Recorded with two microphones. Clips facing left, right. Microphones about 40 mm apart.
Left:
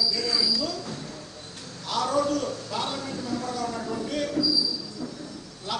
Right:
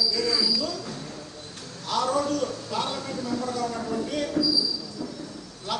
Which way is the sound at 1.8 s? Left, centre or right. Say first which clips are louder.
Even; centre.